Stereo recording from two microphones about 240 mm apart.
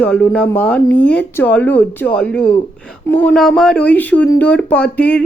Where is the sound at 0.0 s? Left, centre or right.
Centre.